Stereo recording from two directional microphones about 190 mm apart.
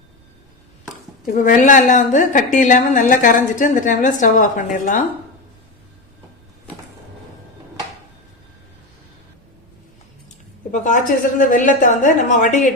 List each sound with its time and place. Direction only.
1.2 s a woman's voice: 45° left (ahead or behind)
10.2 s a woman's voice: 40° left (ahead or behind)